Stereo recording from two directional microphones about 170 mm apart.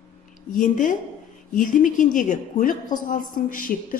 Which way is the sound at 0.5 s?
50° left (ahead or behind).